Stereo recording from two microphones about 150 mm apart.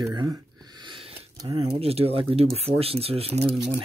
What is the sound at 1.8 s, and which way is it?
Speech, 40° right (ahead or behind).